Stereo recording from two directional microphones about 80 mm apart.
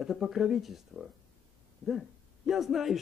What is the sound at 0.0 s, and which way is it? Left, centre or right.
Speech, centre.